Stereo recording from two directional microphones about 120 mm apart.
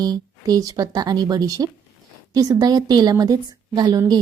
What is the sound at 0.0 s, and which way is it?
A woman's voice, 35° right (ahead or behind).